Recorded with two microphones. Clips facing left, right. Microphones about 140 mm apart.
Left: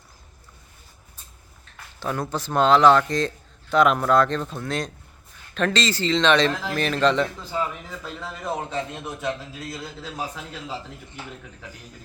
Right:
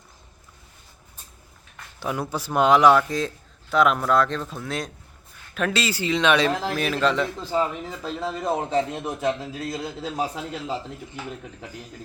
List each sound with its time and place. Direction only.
2.0 s a man's voice: 10° right (ahead or behind)
7.5 s a man's voice: 30° right (ahead or behind)